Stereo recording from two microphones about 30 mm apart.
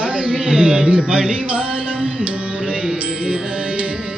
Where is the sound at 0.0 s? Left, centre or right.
Right.